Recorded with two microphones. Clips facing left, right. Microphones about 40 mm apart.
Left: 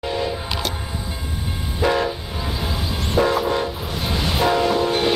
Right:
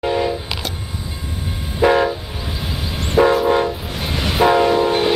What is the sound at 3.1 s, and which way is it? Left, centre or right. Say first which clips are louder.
Train: right 5 dB; centre.